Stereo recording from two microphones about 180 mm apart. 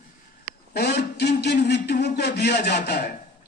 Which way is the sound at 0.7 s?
65° left (ahead or behind).